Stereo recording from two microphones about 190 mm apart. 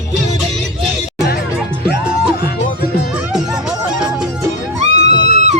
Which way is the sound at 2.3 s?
55° left (ahead or behind).